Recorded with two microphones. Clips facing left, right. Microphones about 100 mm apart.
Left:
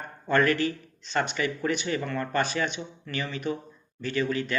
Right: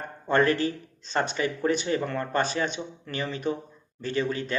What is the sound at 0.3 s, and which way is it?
Speech, 30° right (ahead or behind).